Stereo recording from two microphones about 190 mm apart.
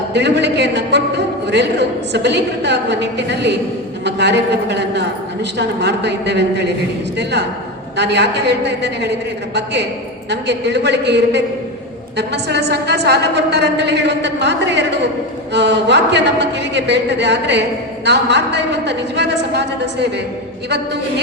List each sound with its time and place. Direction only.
0.1 s a man's voice: 65° right (ahead or behind)
10.2 s a man's voice: 65° right (ahead or behind)